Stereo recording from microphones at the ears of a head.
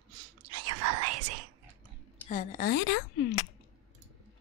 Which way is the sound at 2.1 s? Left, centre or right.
Left.